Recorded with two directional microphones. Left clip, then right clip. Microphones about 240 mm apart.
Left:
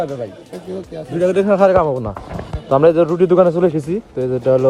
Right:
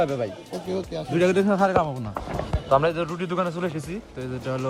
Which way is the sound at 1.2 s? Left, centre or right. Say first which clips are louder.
Left 7 dB; centre.